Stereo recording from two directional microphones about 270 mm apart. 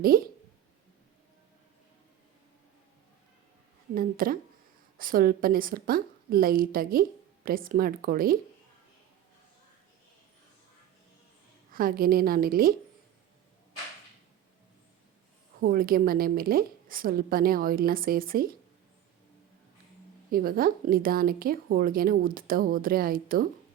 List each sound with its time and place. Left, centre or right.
0.1 s a woman's voice: right
3.9 s a woman's voice: right
11.7 s a woman's voice: right
15.6 s a woman's voice: right
20.3 s a woman's voice: right